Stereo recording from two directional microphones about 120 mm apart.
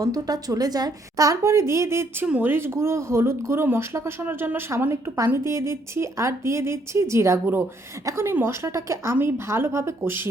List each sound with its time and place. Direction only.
0.0 s speech: 30° right (ahead or behind)